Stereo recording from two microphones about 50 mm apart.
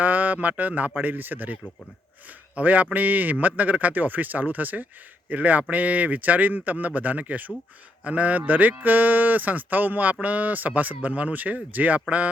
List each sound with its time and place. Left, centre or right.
0.0 s speech: right
2.6 s speech: right